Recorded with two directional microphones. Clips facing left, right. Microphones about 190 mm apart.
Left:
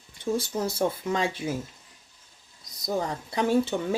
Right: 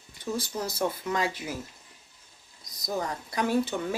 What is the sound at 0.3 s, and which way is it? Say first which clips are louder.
Speech: left 3 dB; 25° left (ahead or behind).